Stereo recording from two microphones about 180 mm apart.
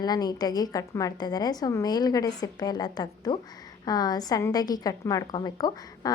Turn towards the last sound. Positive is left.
turn(degrees=20)  # may be behind; listen again after turning